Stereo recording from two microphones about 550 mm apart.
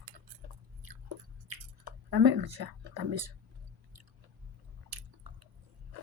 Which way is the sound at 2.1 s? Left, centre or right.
Right.